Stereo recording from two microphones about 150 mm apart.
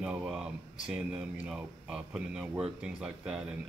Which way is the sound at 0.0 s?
5° right (ahead or behind).